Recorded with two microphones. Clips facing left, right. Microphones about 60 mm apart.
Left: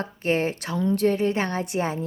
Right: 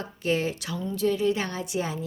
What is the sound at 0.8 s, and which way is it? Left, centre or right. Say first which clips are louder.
Speech: left 9 dB; left.